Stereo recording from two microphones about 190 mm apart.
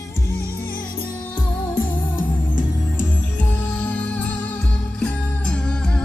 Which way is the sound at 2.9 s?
10° left (ahead or behind).